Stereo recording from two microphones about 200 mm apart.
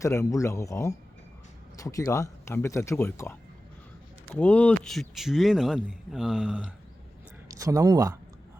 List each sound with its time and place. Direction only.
0.0 s speech: 15° left (ahead or behind)
4.4 s speech: 5° left (ahead or behind)
7.4 s speech: 15° right (ahead or behind)